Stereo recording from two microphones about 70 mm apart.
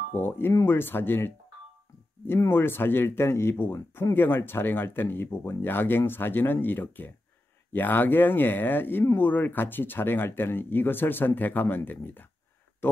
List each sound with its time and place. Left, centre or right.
0.2 s speech: left